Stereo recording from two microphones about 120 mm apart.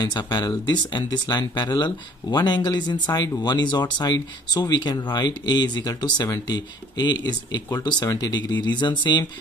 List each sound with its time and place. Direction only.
0.0 s speech: 35° left (ahead or behind)